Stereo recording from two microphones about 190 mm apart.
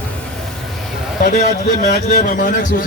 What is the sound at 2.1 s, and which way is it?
Speech, 45° left (ahead or behind).